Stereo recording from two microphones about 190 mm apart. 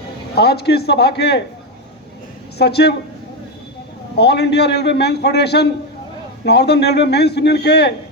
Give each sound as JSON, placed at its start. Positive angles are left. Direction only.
{"t": 0.3, "sound": "a man's voice", "side_deg": 55}
{"t": 2.6, "sound": "a man's voice", "side_deg": 60}
{"t": 4.2, "sound": "a man's voice", "side_deg": 60}